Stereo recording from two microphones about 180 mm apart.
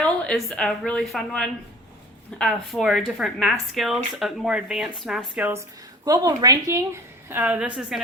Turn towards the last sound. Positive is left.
turn(degrees=-5)  # may be behind; listen again after turning